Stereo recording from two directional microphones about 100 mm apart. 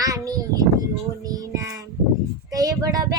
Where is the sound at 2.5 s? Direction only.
35° right (ahead or behind).